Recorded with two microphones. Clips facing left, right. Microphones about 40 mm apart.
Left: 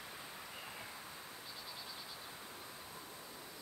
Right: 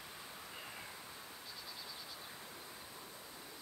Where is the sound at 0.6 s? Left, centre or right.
Centre.